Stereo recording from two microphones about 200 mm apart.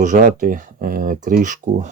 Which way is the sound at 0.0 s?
40° right (ahead or behind).